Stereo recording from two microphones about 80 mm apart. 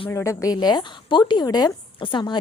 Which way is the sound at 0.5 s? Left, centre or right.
Left.